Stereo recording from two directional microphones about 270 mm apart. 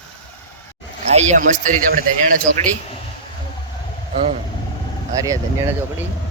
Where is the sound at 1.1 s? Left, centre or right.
Right.